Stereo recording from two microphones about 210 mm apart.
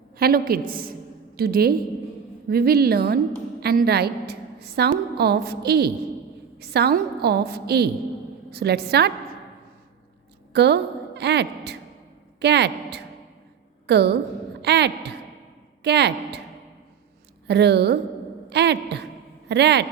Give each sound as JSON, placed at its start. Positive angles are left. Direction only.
{"t": 0.2, "sound": "a woman's voice", "side_deg": -45}
{"t": 10.5, "sound": "a woman's voice", "side_deg": -55}
{"t": 17.5, "sound": "a woman's voice", "side_deg": -55}